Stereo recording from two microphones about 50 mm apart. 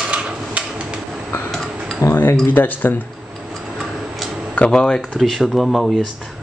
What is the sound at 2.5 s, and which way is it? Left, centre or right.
Speech, left.